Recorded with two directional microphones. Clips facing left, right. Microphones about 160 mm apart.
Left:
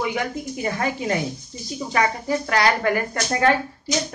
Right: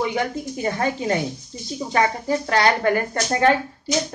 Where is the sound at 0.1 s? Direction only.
35° right (ahead or behind).